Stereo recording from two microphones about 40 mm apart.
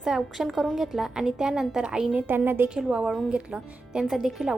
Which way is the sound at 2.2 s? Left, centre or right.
Right.